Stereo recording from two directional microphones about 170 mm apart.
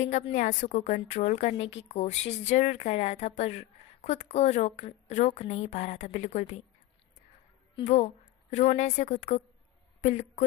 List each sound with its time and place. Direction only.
0.0 s a woman's voice: 45° left (ahead or behind)
7.9 s a woman's voice: 40° left (ahead or behind)